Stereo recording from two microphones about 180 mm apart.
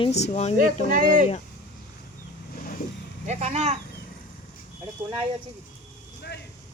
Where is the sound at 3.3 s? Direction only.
40° right (ahead or behind).